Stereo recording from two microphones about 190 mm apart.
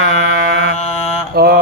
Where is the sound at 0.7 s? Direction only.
35° left (ahead or behind).